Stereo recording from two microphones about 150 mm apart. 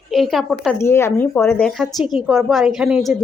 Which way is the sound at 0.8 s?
15° left (ahead or behind).